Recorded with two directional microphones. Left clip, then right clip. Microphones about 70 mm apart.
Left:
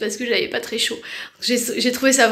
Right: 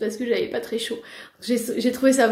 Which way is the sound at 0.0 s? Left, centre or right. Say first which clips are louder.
Left 3 dB; right.